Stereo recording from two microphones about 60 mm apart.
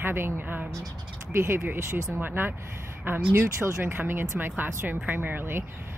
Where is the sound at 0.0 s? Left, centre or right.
Right.